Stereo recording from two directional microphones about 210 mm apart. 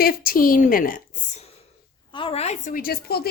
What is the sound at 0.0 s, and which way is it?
A woman's voice, 45° left (ahead or behind).